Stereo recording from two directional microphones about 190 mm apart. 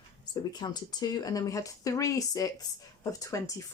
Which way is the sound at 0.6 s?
20° left (ahead or behind).